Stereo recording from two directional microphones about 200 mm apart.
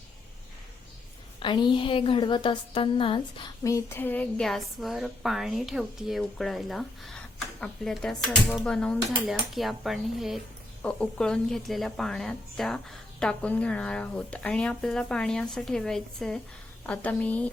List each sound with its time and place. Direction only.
1.4 s a woman's voice: 25° left (ahead or behind)
3.6 s a woman's voice: 15° left (ahead or behind)